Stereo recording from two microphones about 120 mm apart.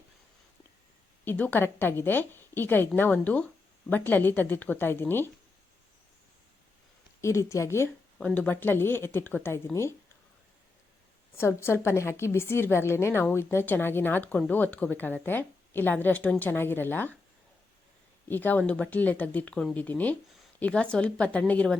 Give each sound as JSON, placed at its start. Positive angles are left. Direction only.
{"t": 1.2, "sound": "a woman's voice", "side_deg": 15}
{"t": 7.2, "sound": "a woman's voice", "side_deg": 25}
{"t": 8.2, "sound": "a woman's voice", "side_deg": 10}
{"t": 11.3, "sound": "a woman's voice", "side_deg": 20}
{"t": 18.3, "sound": "a woman's voice", "side_deg": 15}